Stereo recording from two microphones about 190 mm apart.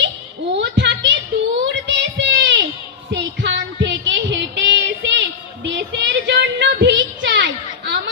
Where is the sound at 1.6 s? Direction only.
70° right (ahead or behind).